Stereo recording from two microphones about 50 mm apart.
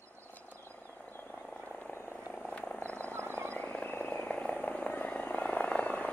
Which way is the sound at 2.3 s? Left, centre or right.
Left.